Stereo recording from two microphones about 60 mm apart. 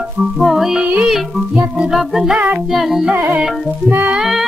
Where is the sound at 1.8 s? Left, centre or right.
Centre.